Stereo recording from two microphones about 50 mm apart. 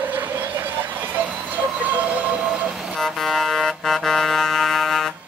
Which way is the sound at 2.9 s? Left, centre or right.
Centre.